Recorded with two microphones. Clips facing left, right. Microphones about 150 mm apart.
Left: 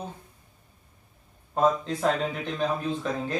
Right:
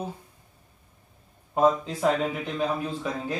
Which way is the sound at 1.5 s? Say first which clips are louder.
Right 2 dB; 5° right (ahead or behind).